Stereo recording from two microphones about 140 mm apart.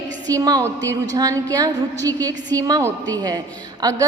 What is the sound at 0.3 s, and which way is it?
A woman's voice, 25° right (ahead or behind).